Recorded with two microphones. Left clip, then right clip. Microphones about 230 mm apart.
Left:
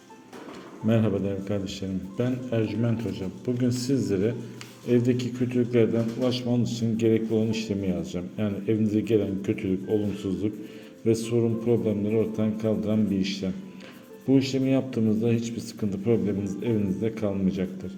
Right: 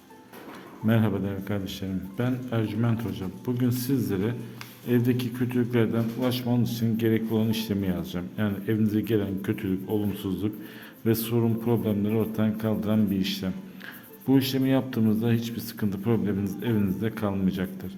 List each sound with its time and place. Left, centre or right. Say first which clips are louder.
0.9 s a man's voice: left 2 dB; centre
11.0 s a man's voice: left 2 dB; right